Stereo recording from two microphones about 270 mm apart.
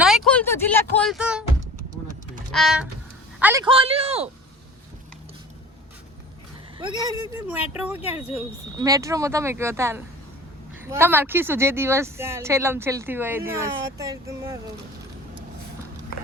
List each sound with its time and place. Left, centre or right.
0.0 s a sound: centre
0.9 s speech: centre
2.5 s speech: centre
3.4 s a man's voice: centre
6.7 s speech: centre